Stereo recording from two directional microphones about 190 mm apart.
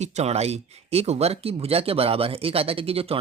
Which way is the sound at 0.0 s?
35° right (ahead or behind).